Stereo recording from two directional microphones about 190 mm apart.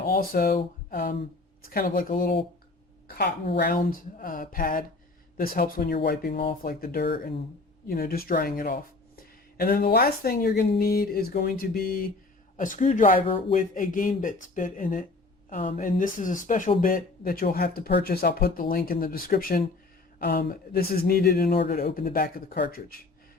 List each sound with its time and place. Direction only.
0.0 s speech: 50° left (ahead or behind)
0.5 s a sound: 45° left (ahead or behind)
1.6 s speech: 50° left (ahead or behind)